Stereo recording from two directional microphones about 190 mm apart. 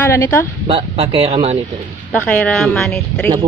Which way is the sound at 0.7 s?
30° right (ahead or behind).